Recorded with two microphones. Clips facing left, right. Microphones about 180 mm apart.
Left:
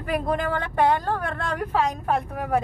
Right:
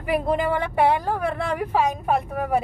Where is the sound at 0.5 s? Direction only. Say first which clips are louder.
Right 1 dB; 10° right (ahead or behind).